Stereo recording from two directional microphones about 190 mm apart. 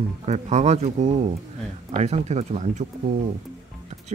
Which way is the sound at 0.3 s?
35° right (ahead or behind).